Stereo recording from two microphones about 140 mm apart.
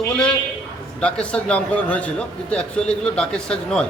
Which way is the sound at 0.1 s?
5° left (ahead or behind).